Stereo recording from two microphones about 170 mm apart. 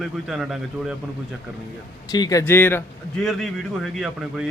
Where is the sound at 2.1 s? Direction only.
20° left (ahead or behind).